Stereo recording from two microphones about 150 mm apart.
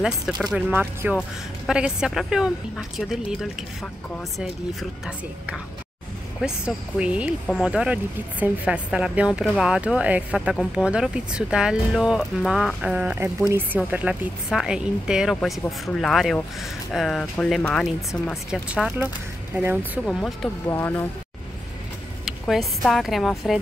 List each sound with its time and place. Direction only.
0.6 s a woman's voice: 10° right (ahead or behind)
4.4 s a woman's voice: 5° right (ahead or behind)
20.1 s speech: 5° left (ahead or behind)
20.6 s speech: 15° left (ahead or behind)
22.5 s speech: centre (ahead or behind)